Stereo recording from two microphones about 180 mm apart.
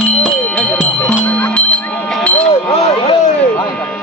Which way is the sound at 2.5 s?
35° left (ahead or behind).